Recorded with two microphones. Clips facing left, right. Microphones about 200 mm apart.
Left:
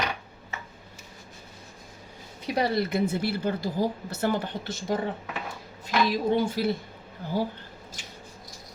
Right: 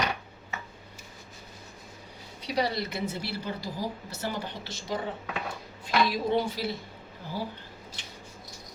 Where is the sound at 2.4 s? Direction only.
50° left (ahead or behind).